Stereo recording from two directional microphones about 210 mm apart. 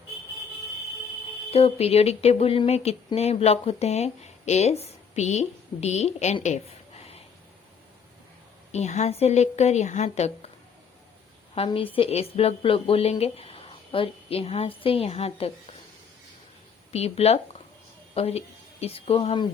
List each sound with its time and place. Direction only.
1.5 s speech: 30° left (ahead or behind)
8.7 s a woman's voice: 35° left (ahead or behind)
11.5 s speech: 25° left (ahead or behind)
16.9 s a woman's voice: 30° left (ahead or behind)